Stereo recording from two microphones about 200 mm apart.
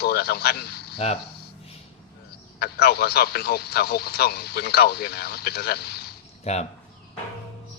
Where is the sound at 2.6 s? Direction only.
50° left (ahead or behind).